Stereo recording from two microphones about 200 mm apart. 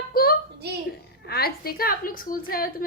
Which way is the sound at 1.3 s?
50° left (ahead or behind).